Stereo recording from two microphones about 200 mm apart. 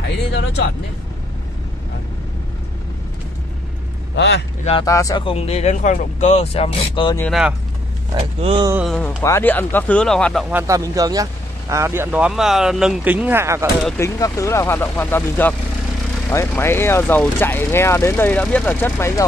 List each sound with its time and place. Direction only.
0.0 s speech: 60° left (ahead or behind)
4.1 s a man's voice: 60° left (ahead or behind)
4.8 s speech: 15° left (ahead or behind)
7.2 s speech: centre (ahead or behind)
8.1 s speech: 25° right (ahead or behind)
8.8 s speech: 5° left (ahead or behind)
10.5 s speech: 15° right (ahead or behind)
13.9 s speech: 15° left (ahead or behind)